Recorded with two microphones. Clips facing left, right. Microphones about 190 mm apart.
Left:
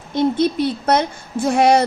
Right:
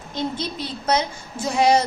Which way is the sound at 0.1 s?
55° left (ahead or behind).